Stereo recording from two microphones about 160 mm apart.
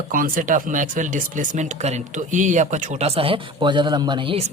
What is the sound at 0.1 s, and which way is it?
Speech, 60° right (ahead or behind).